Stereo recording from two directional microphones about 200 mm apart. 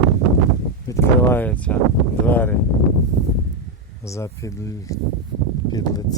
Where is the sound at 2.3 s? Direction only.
10° left (ahead or behind).